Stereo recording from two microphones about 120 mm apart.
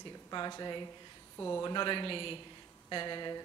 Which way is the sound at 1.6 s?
40° left (ahead or behind).